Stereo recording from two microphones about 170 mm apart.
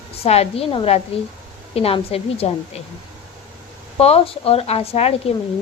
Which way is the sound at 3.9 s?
35° left (ahead or behind).